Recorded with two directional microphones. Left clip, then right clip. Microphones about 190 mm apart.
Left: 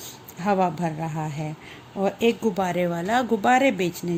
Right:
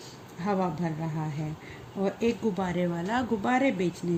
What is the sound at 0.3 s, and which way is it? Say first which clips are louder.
A woman's voice: left 7 dB; 50° left (ahead or behind).